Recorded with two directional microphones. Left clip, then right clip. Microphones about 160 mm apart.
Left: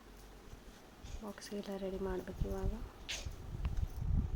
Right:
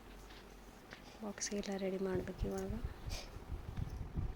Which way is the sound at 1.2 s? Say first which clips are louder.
Right 3 dB; 20° right (ahead or behind).